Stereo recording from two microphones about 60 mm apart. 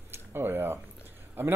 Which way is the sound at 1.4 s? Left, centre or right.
Right.